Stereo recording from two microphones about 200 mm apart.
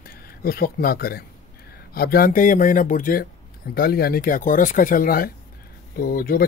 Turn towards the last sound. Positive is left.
turn(degrees=45)  # may be behind; listen again after turning